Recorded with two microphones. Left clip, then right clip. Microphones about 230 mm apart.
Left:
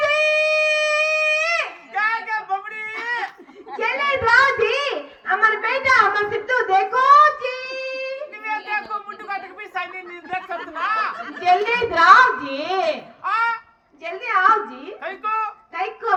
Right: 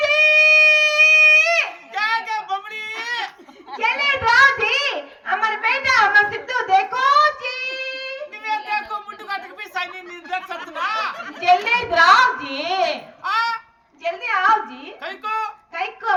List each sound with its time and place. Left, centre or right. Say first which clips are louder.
0.0 s wind instrument: right 4 dB; right
3.0 s crying: left 1 dB; right
3.7 s a sound: right 2 dB; right